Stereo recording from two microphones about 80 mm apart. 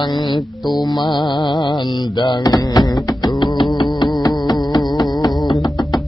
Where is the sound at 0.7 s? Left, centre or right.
Left.